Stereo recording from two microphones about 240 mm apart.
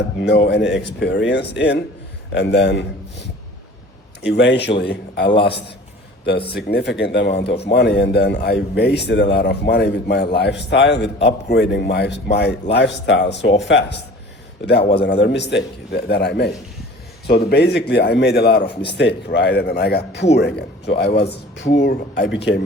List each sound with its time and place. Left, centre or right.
0.4 s speech: left
6.5 s speech: left
18.6 s speech: left
18.9 s speech: left